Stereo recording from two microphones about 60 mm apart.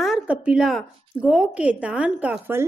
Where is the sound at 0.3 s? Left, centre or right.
Right.